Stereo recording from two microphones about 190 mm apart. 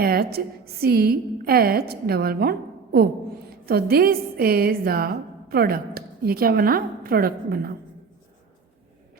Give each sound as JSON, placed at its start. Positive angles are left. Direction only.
{"t": 0.0, "sound": "a woman's voice", "side_deg": -55}